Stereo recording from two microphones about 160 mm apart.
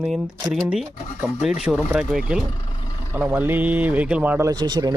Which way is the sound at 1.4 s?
5° right (ahead or behind).